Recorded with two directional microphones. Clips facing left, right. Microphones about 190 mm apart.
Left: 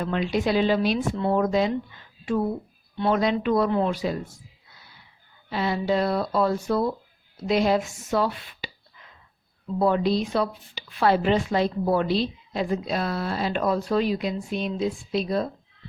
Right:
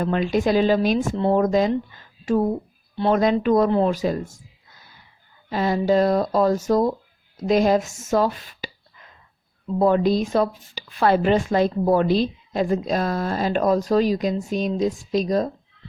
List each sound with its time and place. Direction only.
0.0 s a woman's voice: 45° right (ahead or behind)
9.7 s speech: 45° right (ahead or behind)